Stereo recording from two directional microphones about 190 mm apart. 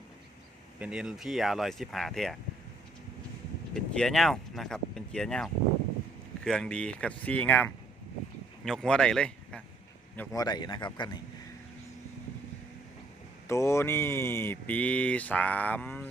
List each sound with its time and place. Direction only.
0.8 s speech: 5° right (ahead or behind)
3.8 s speech: 5° left (ahead or behind)
10.2 s a man's voice: 20° left (ahead or behind)
13.5 s speech: 15° left (ahead or behind)